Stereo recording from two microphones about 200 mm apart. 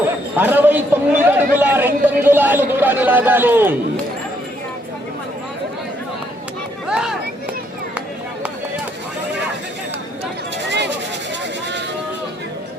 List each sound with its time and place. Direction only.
0.3 s a man's voice: 10° right (ahead or behind)
6.8 s chatter: 5° right (ahead or behind)
10.7 s a sound: 60° right (ahead or behind)